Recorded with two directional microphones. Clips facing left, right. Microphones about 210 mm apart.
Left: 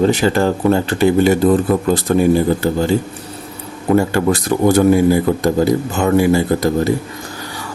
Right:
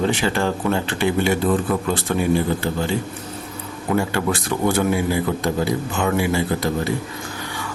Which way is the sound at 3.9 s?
40° left (ahead or behind).